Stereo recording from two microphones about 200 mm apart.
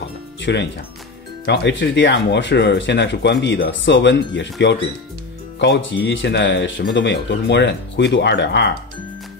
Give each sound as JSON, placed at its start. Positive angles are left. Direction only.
{"t": 0.4, "sound": "speech", "side_deg": 60}
{"t": 5.6, "sound": "speech", "side_deg": 65}